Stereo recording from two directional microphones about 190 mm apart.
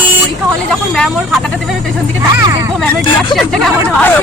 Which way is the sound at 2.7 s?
5° left (ahead or behind).